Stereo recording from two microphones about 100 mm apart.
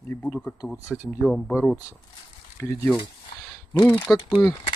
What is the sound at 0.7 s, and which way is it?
Speech, 25° left (ahead or behind).